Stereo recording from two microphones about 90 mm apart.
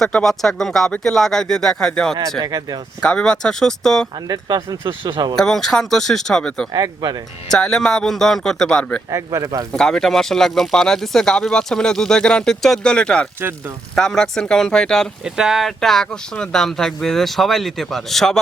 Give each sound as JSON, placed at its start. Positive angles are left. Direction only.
{"t": 0.0, "sound": "speech", "side_deg": 5}
{"t": 2.4, "sound": "speech", "side_deg": -45}
{"t": 3.0, "sound": "speech", "side_deg": 10}
{"t": 4.3, "sound": "speech", "side_deg": -50}
{"t": 5.4, "sound": "speech", "side_deg": 5}
{"t": 6.7, "sound": "speech", "side_deg": -50}
{"t": 7.5, "sound": "speech", "side_deg": 5}
{"t": 9.0, "sound": "speech", "side_deg": -35}
{"t": 9.7, "sound": "speech", "side_deg": 5}
{"t": 15.2, "sound": "speech", "side_deg": -5}